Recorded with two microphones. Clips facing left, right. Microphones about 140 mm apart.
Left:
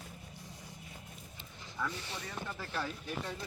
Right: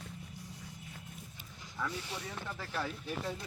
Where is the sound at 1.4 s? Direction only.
5° right (ahead or behind).